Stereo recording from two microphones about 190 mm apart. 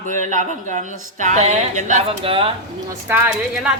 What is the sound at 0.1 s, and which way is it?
Speech, 40° right (ahead or behind).